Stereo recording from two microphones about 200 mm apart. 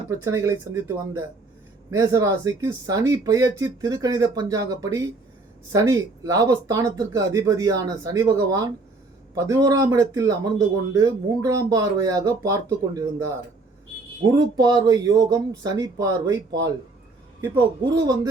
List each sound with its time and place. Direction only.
0.3 s speech: 15° right (ahead or behind)
17.5 s speech: 20° right (ahead or behind)